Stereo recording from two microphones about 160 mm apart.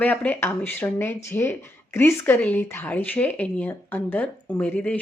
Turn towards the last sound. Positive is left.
turn(degrees=10)  # may be behind; listen again after turning